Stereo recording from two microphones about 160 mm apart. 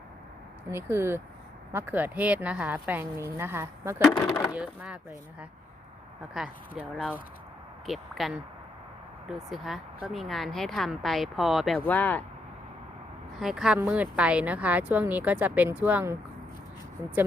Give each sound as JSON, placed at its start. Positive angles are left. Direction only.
{"t": 0.7, "sound": "speech", "side_deg": -15}
{"t": 6.3, "sound": "speech", "side_deg": -5}
{"t": 9.5, "sound": "speech", "side_deg": 0}
{"t": 11.8, "sound": "speech", "side_deg": 10}
{"t": 13.4, "sound": "speech", "side_deg": -5}